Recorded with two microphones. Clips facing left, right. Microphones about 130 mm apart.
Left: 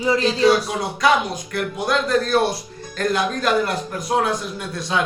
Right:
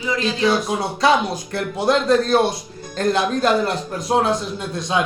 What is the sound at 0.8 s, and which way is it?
Speech, 30° right (ahead or behind).